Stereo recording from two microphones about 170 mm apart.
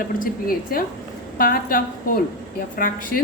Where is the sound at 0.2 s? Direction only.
55° left (ahead or behind).